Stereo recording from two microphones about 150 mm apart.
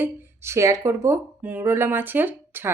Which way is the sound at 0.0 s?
20° right (ahead or behind).